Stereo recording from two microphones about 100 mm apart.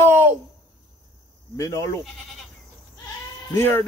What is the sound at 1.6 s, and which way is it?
Speech, 30° left (ahead or behind).